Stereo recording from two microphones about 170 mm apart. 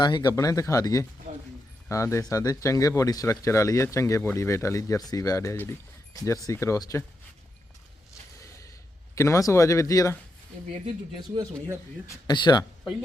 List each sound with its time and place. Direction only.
0.0 s speech: 25° left (ahead or behind)
1.3 s a sound: 45° right (ahead or behind)
1.9 s speech: 15° left (ahead or behind)
9.1 s speech: 15° left (ahead or behind)
10.8 s speech: 25° right (ahead or behind)
12.0 s speech: 25° left (ahead or behind)